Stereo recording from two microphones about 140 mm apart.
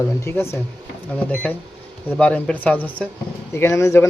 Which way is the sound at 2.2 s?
10° left (ahead or behind).